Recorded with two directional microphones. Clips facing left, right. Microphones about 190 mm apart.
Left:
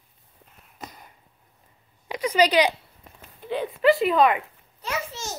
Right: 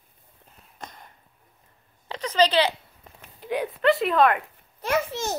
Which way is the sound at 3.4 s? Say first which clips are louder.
Right 1 dB; 10° right (ahead or behind).